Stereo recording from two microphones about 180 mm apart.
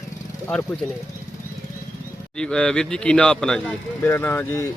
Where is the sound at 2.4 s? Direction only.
5° left (ahead or behind).